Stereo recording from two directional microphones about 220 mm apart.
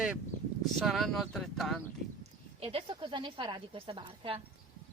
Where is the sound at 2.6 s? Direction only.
25° right (ahead or behind).